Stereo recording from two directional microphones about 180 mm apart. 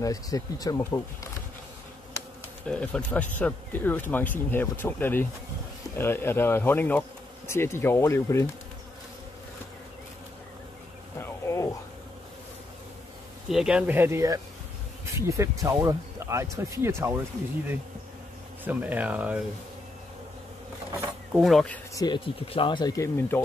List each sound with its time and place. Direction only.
0.0 s speech: 20° left (ahead or behind)
2.1 s speech: 5° left (ahead or behind)
11.1 s a sound: 15° left (ahead or behind)
13.5 s speech: 5° right (ahead or behind)
18.6 s speech: 10° right (ahead or behind)
21.0 s mechanisms: 5° right (ahead or behind)
21.9 s speech: 25° left (ahead or behind)